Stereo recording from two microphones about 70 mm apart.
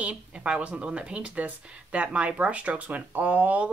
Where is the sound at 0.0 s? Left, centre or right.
Centre.